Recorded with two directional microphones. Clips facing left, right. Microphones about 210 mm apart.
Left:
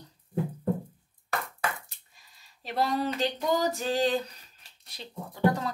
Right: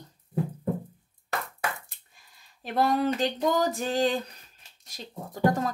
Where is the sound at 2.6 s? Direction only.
50° right (ahead or behind).